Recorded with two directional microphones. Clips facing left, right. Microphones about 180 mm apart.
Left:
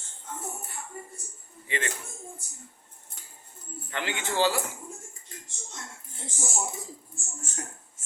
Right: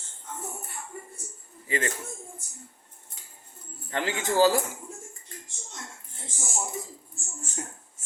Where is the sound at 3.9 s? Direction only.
35° right (ahead or behind).